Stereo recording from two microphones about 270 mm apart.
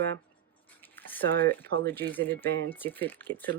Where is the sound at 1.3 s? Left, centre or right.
Right.